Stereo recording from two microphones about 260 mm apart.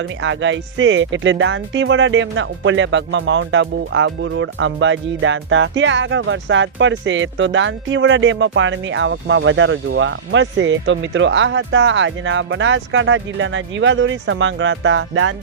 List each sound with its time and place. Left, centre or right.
0.2 s speech: right